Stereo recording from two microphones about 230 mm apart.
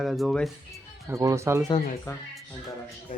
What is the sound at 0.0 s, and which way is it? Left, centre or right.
Speech, centre.